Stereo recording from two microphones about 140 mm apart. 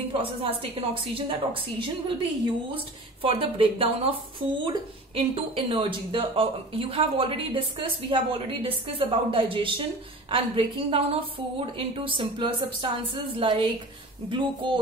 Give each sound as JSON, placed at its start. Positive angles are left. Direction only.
{"t": 0.1, "sound": "speech", "side_deg": -40}
{"t": 5.1, "sound": "speech", "side_deg": -40}